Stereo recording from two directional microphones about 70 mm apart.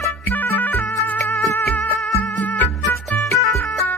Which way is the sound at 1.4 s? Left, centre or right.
Left.